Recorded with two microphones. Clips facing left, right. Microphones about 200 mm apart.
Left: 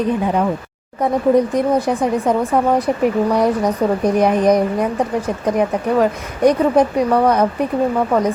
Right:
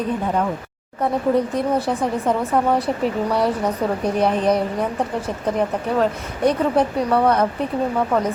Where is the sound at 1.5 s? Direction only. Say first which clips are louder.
Left 4 dB; 15° left (ahead or behind).